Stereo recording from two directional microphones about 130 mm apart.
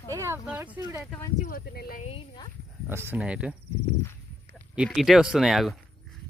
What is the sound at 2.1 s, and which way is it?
Speech, 40° left (ahead or behind).